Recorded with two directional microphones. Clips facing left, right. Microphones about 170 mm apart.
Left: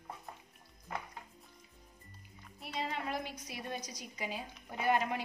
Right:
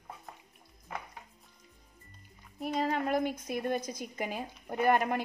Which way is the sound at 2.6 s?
45° right (ahead or behind).